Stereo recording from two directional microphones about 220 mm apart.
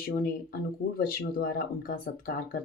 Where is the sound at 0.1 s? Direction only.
40° left (ahead or behind).